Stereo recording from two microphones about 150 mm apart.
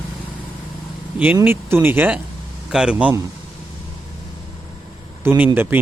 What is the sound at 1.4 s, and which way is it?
Speech, 15° right (ahead or behind).